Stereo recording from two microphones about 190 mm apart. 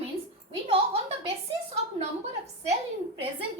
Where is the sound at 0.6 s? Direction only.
30° right (ahead or behind).